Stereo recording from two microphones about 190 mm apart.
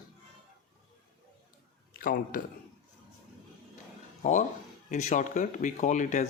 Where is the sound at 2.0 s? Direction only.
50° left (ahead or behind).